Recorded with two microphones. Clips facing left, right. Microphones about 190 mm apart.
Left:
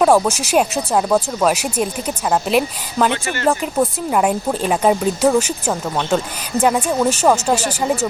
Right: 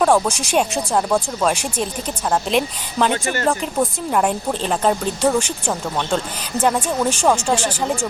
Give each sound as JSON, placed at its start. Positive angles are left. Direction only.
{"t": 0.0, "sound": "speech", "side_deg": 5}